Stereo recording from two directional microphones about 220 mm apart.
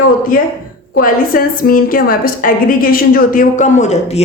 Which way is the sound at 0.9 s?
40° left (ahead or behind).